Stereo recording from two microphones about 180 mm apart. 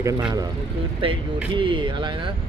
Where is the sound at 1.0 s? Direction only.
30° right (ahead or behind).